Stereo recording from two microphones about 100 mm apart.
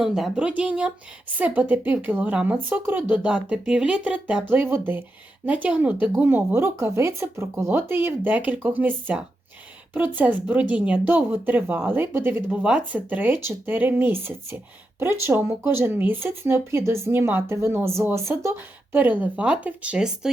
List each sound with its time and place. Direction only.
0.0 s speech: 5° right (ahead or behind)